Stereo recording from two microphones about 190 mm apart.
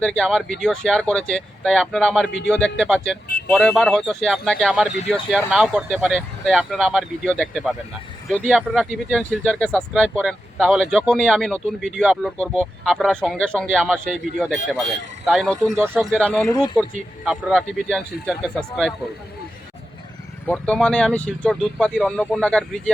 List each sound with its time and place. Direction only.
0.0 s speech: 5° left (ahead or behind)
16.5 s speech: 20° left (ahead or behind)
17.2 s speech: centre (ahead or behind)
20.5 s speech: 5° left (ahead or behind)